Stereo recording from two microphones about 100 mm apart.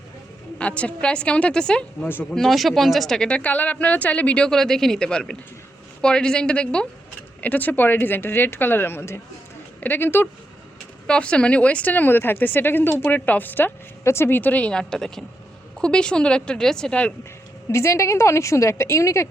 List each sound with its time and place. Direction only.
0.6 s speech: 10° left (ahead or behind)
2.0 s speech: 20° left (ahead or behind)
2.3 s speech: centre (ahead or behind); by 10.2 s 20° left (ahead or behind)
11.0 s speech: 10° left (ahead or behind)
17.7 s speech: 30° left (ahead or behind)